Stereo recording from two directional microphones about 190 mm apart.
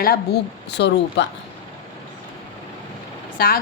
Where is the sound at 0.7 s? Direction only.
65° left (ahead or behind).